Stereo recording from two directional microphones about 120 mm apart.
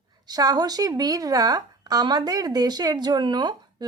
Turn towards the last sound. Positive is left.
turn(degrees=-40)  # may be behind; listen again after turning